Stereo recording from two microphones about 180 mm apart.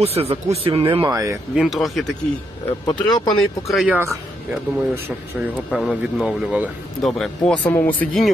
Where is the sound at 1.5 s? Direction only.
Centre (ahead or behind).